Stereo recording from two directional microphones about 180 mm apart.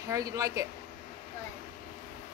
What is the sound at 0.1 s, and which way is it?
Speech, 20° right (ahead or behind).